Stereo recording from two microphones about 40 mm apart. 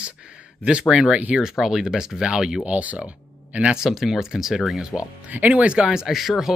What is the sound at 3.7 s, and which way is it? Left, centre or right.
Speech, centre.